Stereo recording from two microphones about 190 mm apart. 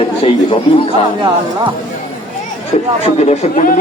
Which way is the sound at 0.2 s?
30° left (ahead or behind).